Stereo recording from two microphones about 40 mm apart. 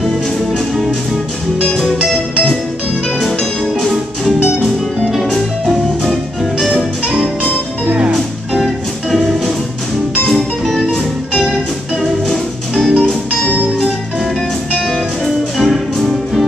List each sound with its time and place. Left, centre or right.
0.0 s music: centre
1.6 s music: centre
1.9 s music: centre
3.8 s music: centre
10.2 s music: centre
12.7 s music: centre
14.7 s music: centre